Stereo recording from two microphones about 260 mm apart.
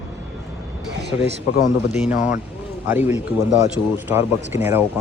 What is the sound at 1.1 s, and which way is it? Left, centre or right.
Speech, centre.